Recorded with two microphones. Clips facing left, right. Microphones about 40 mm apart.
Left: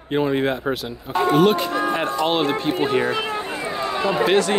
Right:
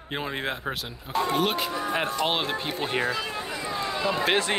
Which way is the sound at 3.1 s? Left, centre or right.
Left.